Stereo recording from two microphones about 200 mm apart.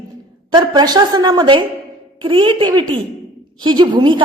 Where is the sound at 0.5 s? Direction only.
20° right (ahead or behind).